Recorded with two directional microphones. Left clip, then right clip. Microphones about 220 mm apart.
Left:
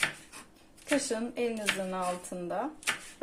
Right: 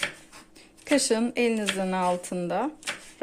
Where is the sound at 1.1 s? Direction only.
45° right (ahead or behind).